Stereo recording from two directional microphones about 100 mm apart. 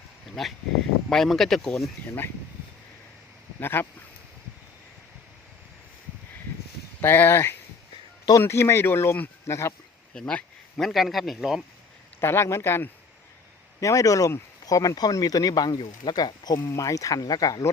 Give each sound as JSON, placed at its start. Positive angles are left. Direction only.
{"t": 0.4, "sound": "a man's voice", "side_deg": 5}
{"t": 3.6, "sound": "speech", "side_deg": 20}
{"t": 7.0, "sound": "speech", "side_deg": 20}
{"t": 10.2, "sound": "a man's voice", "side_deg": 10}
{"t": 12.2, "sound": "speech", "side_deg": 25}